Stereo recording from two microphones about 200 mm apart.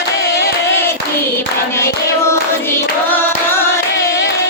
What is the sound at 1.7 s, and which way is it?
Hands, 15° left (ahead or behind).